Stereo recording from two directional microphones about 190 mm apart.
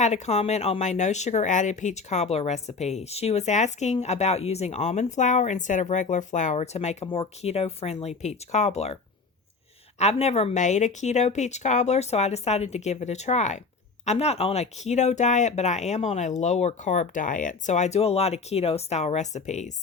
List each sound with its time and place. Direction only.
0.0 s speech: 35° left (ahead or behind)
10.0 s speech: 35° left (ahead or behind)